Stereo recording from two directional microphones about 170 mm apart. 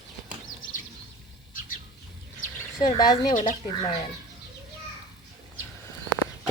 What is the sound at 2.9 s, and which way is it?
Speech, 25° left (ahead or behind).